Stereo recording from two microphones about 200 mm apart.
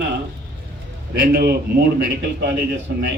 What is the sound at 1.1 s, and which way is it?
A man's voice, 50° right (ahead or behind).